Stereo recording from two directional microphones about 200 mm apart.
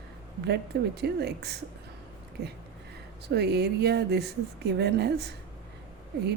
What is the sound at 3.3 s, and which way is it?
Speech, 55° right (ahead or behind).